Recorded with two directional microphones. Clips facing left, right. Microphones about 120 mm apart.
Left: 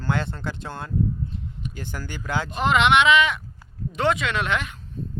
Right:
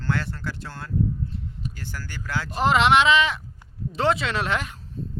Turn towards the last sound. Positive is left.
turn(degrees=-35)  # may be behind; listen again after turning